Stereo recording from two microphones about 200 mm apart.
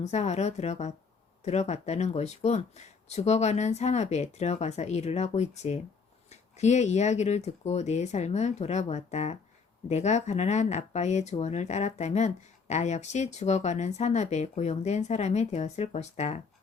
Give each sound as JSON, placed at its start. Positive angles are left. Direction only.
{"t": 0.0, "sound": "speech", "side_deg": 35}